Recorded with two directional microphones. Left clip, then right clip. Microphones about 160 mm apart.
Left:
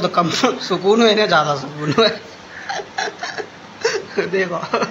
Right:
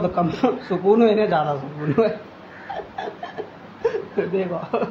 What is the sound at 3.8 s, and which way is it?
Speech, 15° left (ahead or behind).